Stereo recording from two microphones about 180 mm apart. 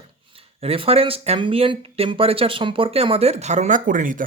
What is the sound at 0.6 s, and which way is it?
Speech, 35° right (ahead or behind).